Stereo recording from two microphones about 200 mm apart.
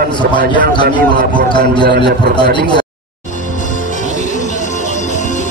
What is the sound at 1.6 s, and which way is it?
A man's voice, 55° right (ahead or behind).